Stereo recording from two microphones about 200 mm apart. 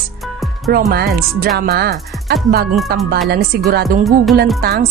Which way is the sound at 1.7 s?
55° right (ahead or behind).